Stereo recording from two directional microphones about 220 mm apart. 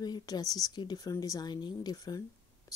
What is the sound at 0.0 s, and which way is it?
A woman's voice, 20° left (ahead or behind).